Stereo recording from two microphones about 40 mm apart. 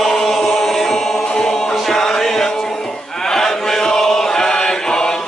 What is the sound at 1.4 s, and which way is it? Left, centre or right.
Music, centre.